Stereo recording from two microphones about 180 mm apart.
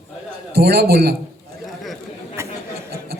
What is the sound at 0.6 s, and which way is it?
Speech, 60° right (ahead or behind).